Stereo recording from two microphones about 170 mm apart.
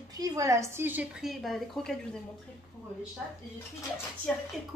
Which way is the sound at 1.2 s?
Centre (ahead or behind).